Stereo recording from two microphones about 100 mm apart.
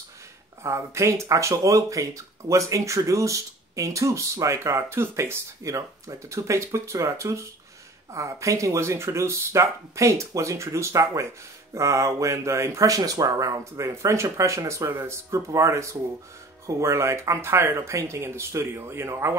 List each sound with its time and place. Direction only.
0.7 s speech: 30° right (ahead or behind)